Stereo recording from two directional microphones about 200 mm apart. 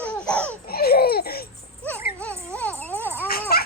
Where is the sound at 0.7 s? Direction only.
50° left (ahead or behind).